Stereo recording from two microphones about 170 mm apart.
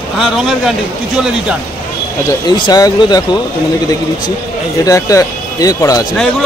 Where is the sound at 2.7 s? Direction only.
25° left (ahead or behind).